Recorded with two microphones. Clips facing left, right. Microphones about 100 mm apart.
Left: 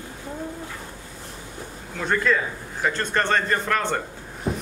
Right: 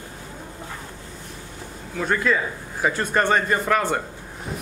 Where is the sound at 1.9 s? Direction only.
5° right (ahead or behind).